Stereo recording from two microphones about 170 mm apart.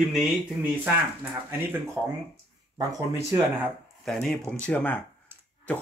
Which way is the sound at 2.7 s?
20° right (ahead or behind).